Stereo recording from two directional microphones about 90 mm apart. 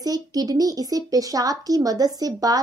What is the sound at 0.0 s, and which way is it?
Speech, 45° right (ahead or behind).